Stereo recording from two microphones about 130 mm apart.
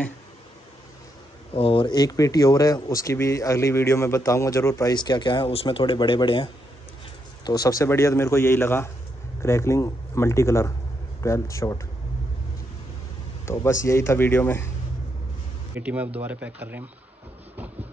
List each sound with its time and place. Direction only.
1.5 s speech: 45° left (ahead or behind); by 4.9 s 25° left (ahead or behind)
4.9 s speech: 35° left (ahead or behind)
7.4 s speech: 30° left (ahead or behind)
13.5 s speech: 20° left (ahead or behind)
15.7 s speech: 10° right (ahead or behind)